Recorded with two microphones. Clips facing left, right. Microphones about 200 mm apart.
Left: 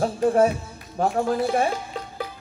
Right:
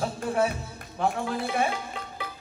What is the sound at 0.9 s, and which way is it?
Speech, 40° left (ahead or behind).